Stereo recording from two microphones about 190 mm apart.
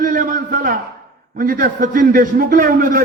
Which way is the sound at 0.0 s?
45° right (ahead or behind).